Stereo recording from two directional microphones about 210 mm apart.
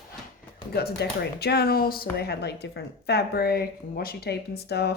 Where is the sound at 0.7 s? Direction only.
50° left (ahead or behind).